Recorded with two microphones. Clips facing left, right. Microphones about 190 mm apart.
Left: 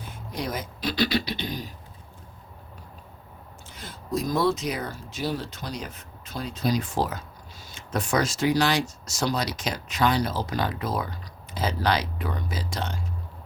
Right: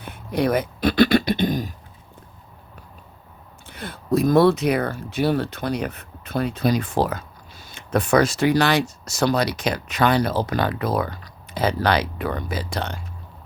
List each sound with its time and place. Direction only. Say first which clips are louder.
0.0 s speech: right 10 dB; 60° right (ahead or behind)
3.7 s speech: right 8 dB; 60° right (ahead or behind)